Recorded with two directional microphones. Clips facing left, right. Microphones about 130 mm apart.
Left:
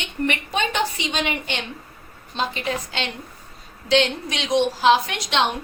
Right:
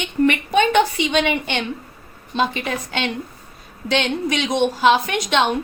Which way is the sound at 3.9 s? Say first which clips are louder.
Even; 55° right (ahead or behind).